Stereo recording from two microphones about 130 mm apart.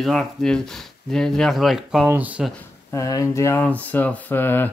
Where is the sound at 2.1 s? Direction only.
10° right (ahead or behind).